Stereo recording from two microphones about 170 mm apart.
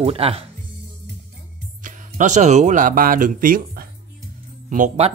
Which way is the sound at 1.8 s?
50° right (ahead or behind).